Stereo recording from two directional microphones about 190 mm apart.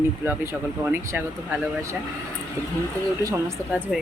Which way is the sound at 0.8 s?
10° right (ahead or behind).